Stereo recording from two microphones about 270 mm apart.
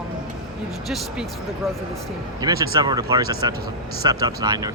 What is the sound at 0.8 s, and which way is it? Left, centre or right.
Speech, centre.